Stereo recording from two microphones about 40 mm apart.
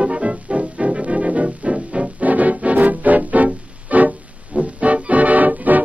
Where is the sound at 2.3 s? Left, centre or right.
Right.